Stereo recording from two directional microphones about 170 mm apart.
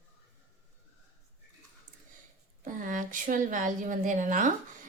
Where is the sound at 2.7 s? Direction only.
50° right (ahead or behind).